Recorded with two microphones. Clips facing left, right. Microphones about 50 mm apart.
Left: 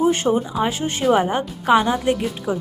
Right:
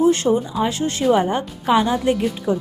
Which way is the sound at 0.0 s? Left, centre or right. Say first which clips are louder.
Right 2 dB; centre.